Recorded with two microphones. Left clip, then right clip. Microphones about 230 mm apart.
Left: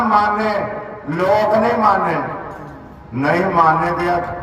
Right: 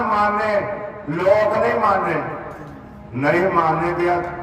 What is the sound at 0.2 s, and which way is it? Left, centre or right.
A man's voice, left.